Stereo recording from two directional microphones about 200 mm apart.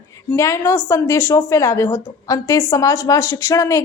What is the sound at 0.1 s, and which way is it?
A woman's voice, 15° left (ahead or behind).